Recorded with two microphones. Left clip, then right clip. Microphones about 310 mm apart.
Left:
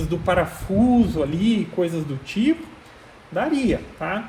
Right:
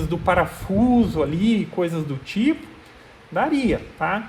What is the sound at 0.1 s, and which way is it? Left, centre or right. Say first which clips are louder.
A man's voice: right 1 dB; right.